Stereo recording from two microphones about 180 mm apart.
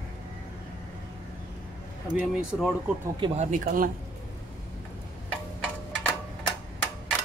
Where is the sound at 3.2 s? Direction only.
40° right (ahead or behind).